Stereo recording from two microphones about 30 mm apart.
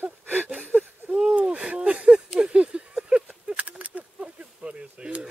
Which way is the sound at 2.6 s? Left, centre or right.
Right.